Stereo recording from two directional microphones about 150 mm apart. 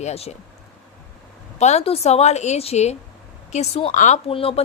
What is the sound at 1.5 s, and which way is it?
A woman's voice, 50° left (ahead or behind).